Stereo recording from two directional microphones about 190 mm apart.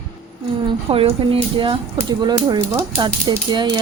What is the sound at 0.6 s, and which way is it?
Speech, 30° right (ahead or behind).